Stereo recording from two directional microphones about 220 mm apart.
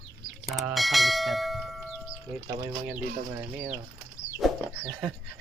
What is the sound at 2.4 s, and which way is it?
Speech, 15° right (ahead or behind).